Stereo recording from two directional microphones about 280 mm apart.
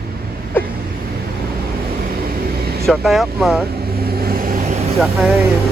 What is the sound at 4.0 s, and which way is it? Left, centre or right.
Vehicle, right.